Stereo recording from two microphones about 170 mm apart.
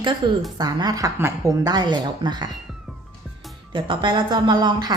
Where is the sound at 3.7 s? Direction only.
30° right (ahead or behind).